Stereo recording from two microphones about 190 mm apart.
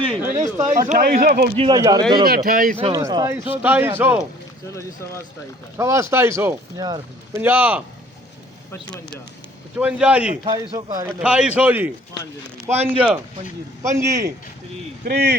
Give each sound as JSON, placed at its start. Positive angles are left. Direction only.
{"t": 0.2, "sound": "a sound", "side_deg": -15}
{"t": 0.9, "sound": "speech", "side_deg": -45}
{"t": 1.7, "sound": "speech", "side_deg": -20}
{"t": 2.2, "sound": "speech", "side_deg": -50}
{"t": 2.9, "sound": "speech", "side_deg": -20}
{"t": 5.7, "sound": "speech", "side_deg": -15}
{"t": 7.4, "sound": "speech", "side_deg": -10}
{"t": 9.7, "sound": "speech", "side_deg": -5}
{"t": 10.5, "sound": "speech", "side_deg": -20}
{"t": 12.7, "sound": "speech", "side_deg": -35}
{"t": 13.8, "sound": "speech", "side_deg": -15}
{"t": 15.0, "sound": "speech", "side_deg": -60}